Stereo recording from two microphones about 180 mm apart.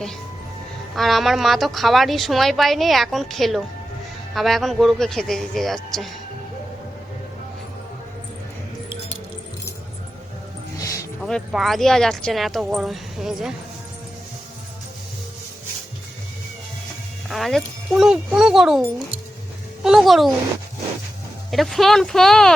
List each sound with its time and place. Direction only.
0.9 s speech: centre (ahead or behind)
10.8 s music: 20° left (ahead or behind)
11.2 s speech: 5° left (ahead or behind)
17.2 s speech: centre (ahead or behind)
21.5 s speech: centre (ahead or behind)